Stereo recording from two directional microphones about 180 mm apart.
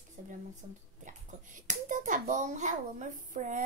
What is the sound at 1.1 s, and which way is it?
A child's voice, 45° right (ahead or behind).